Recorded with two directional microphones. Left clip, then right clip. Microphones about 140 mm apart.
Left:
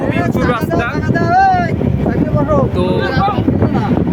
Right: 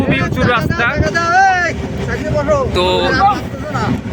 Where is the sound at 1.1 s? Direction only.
35° left (ahead or behind).